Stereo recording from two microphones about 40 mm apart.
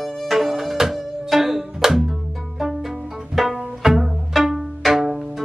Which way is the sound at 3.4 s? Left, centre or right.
Centre.